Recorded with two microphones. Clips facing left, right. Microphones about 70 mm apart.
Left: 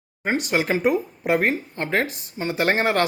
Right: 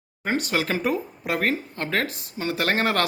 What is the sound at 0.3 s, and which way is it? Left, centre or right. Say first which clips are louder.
A man's voice: left 2 dB; left.